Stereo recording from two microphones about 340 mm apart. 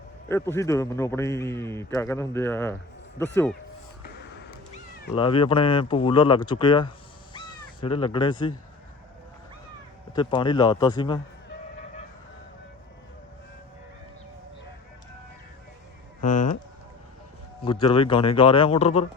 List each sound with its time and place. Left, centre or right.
0.3 s a man's voice: centre
5.1 s a man's voice: centre
10.1 s a man's voice: centre
16.2 s speech: left
17.6 s a man's voice: centre